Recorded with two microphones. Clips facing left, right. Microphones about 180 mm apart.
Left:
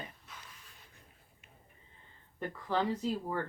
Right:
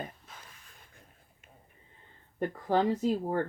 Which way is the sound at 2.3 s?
45° right (ahead or behind).